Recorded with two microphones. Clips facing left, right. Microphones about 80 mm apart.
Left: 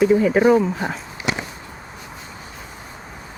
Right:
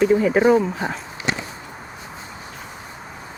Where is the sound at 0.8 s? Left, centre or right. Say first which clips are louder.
Even; right.